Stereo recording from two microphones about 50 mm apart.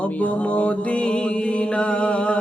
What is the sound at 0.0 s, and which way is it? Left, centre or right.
Mantra, left.